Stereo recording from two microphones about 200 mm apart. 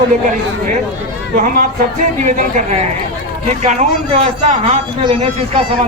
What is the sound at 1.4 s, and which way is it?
A man's voice, 40° right (ahead or behind).